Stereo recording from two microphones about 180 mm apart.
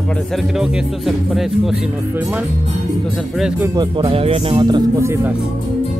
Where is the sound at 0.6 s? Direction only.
Centre (ahead or behind).